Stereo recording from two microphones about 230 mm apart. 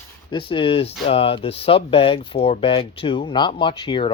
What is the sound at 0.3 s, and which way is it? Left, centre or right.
Speech, left.